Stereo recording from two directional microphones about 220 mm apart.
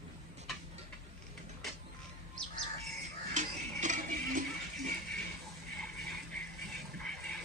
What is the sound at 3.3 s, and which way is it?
Music, 35° right (ahead or behind).